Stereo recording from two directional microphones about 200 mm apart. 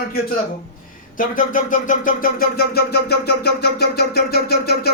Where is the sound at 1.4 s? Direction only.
40° left (ahead or behind).